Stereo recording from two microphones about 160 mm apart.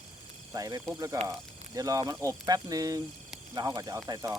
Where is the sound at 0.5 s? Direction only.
20° right (ahead or behind).